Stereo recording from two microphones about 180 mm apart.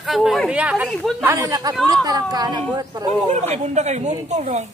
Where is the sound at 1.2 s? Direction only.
20° right (ahead or behind).